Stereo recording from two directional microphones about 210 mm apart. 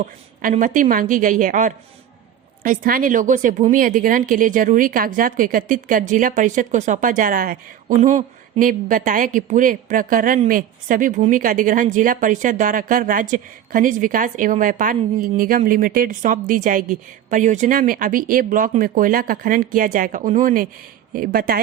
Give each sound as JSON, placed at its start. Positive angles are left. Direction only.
{"t": 0.0, "sound": "speech", "side_deg": -35}